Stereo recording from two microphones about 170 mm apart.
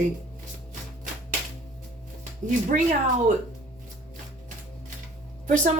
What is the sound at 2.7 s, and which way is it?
Speech, 50° right (ahead or behind).